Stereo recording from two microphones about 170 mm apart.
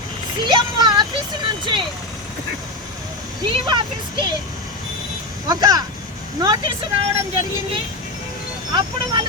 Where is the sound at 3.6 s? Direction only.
25° right (ahead or behind).